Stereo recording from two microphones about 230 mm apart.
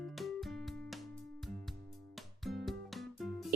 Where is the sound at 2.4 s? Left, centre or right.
Centre.